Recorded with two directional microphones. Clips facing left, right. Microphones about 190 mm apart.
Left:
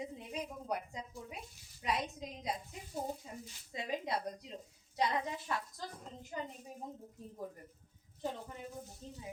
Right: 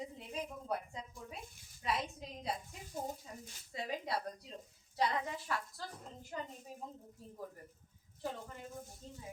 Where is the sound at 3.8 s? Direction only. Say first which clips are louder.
Left 2 dB; 20° left (ahead or behind).